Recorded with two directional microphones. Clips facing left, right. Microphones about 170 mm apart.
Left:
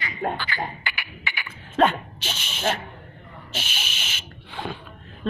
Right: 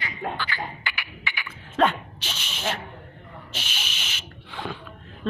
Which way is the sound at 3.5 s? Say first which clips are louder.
Left 3 dB; 5° left (ahead or behind).